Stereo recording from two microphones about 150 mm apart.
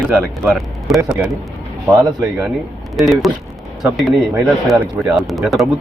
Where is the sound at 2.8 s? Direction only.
Centre (ahead or behind).